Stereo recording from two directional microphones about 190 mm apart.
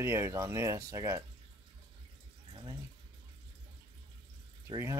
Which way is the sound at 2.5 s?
20° right (ahead or behind).